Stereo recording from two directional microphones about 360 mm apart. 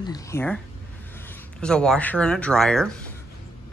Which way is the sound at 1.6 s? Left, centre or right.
Centre.